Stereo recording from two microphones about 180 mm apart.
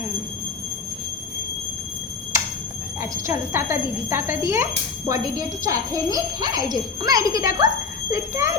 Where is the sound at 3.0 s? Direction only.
15° right (ahead or behind).